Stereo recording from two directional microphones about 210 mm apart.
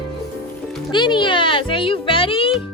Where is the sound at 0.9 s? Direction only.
20° left (ahead or behind).